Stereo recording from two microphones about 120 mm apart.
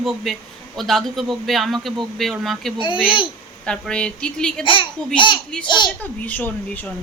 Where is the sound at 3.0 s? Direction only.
45° left (ahead or behind).